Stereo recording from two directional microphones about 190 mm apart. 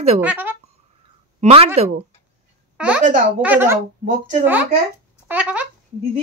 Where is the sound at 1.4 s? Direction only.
30° right (ahead or behind).